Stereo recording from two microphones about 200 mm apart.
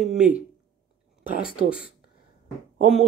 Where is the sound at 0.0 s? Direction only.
5° right (ahead or behind).